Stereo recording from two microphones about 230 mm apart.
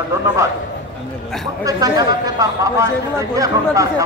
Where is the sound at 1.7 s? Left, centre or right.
Centre.